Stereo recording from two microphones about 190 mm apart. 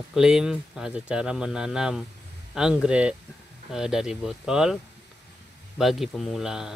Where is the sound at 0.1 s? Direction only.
5° right (ahead or behind).